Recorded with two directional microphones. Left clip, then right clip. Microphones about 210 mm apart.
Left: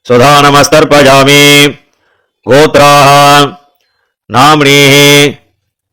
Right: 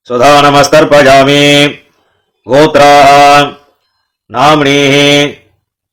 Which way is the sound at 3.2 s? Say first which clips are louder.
Even; 40° left (ahead or behind).